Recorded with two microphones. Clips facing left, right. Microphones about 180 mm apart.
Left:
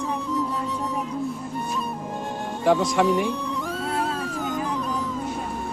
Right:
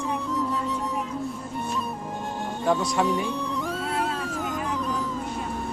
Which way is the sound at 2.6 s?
90° left.